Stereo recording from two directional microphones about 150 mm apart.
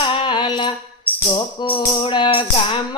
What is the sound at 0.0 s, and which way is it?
Music, 35° left (ahead or behind).